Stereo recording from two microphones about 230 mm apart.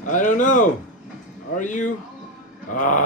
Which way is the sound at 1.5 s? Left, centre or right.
Left.